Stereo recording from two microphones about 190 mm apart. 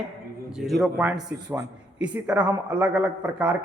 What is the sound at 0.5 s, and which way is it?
A man's voice, centre (ahead or behind).